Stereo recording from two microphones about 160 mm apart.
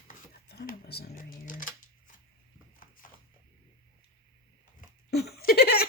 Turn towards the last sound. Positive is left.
turn(degrees=75)  # may be behind; listen again after turning